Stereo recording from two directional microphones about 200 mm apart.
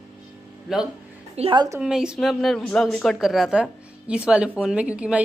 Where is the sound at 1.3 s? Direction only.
25° right (ahead or behind).